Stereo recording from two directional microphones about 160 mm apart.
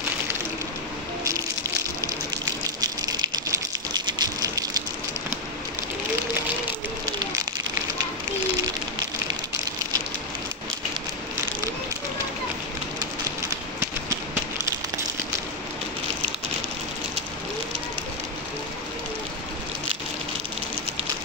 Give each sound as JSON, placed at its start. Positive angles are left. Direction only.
{"t": 2.3, "sound": "gush", "side_deg": -25}